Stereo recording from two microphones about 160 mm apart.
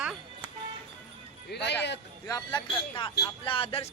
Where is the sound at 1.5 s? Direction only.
90° left.